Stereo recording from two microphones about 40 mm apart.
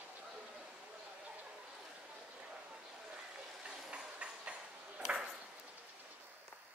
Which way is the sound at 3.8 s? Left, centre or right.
Right.